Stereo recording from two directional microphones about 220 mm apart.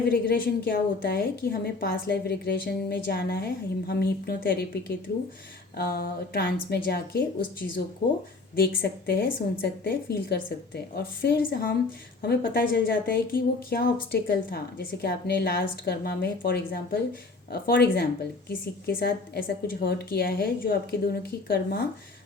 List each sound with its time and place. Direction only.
0.1 s a woman's voice: 45° left (ahead or behind)